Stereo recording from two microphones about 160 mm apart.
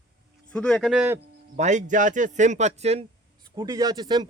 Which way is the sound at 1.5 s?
50° right (ahead or behind).